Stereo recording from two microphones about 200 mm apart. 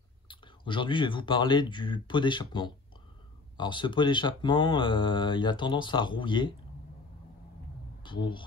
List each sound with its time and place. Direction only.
0.3 s speech: 25° left (ahead or behind)
8.0 s speech: 25° left (ahead or behind)